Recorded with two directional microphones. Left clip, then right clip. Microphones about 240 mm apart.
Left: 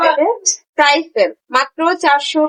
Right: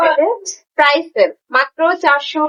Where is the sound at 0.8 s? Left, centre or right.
Left.